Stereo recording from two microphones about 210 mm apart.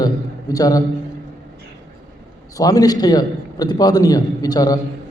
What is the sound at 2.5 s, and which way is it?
A man's voice, 15° left (ahead or behind).